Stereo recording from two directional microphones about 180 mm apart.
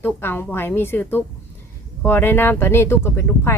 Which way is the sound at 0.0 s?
10° left (ahead or behind).